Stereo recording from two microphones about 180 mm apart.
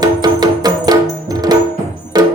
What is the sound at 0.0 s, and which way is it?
Music, 20° right (ahead or behind).